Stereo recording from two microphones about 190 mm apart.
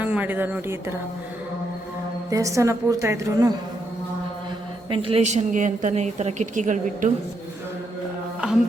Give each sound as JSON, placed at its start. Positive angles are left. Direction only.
{"t": 0.0, "sound": "speech", "side_deg": -10}
{"t": 2.3, "sound": "a woman's voice", "side_deg": -15}
{"t": 4.9, "sound": "a woman's voice", "side_deg": -30}